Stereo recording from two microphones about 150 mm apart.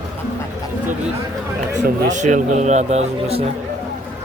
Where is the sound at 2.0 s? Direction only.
55° right (ahead or behind).